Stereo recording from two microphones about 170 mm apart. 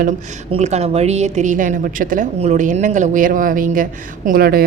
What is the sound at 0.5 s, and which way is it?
A woman's voice, 40° right (ahead or behind).